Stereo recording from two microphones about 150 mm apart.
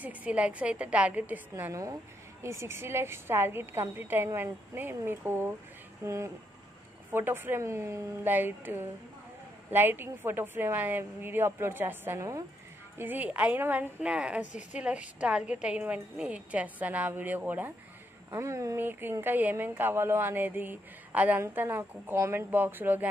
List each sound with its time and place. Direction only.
0.0 s speech: 10° right (ahead or behind)
1.5 s a woman's voice: 20° right (ahead or behind)